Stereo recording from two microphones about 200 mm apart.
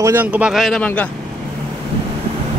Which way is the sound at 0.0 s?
10° right (ahead or behind).